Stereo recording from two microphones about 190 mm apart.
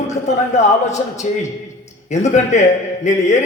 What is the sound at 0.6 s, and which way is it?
A man's voice, 40° left (ahead or behind).